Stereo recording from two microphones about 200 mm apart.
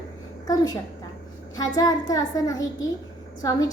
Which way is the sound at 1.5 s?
20° left (ahead or behind).